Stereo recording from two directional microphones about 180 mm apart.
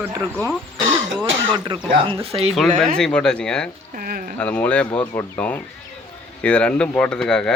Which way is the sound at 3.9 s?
50° right (ahead or behind).